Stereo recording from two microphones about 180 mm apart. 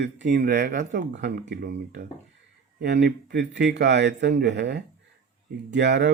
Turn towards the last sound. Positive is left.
turn(degrees=-75)  # may be behind; listen again after turning